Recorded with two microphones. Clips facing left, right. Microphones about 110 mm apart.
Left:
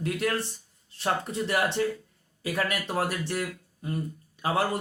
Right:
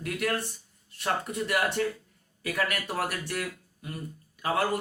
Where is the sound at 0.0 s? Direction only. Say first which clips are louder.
Left 2 dB; 25° left (ahead or behind).